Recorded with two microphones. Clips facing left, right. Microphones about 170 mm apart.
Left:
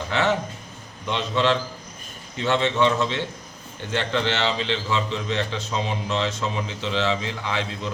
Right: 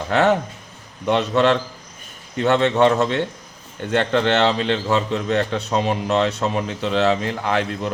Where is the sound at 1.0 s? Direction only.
65° right (ahead or behind).